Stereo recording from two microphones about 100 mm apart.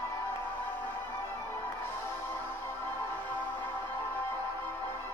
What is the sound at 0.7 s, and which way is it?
Music, 20° left (ahead or behind).